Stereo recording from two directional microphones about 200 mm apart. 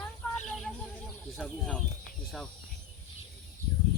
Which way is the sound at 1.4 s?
Centre (ahead or behind).